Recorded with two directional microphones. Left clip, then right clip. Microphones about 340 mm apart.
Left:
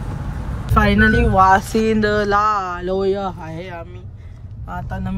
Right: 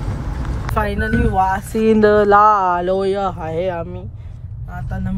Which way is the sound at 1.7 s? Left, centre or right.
Centre.